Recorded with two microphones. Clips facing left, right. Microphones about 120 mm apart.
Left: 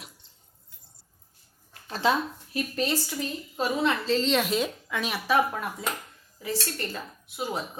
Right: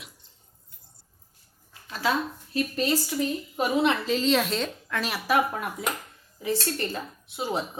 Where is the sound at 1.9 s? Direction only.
25° left (ahead or behind).